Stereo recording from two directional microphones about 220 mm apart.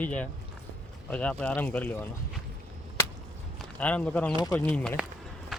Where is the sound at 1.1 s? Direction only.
5° left (ahead or behind).